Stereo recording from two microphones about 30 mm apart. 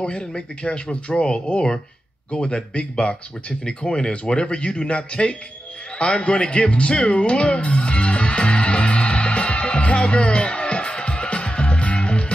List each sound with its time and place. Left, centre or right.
0.0 s speech: left
5.9 s music: left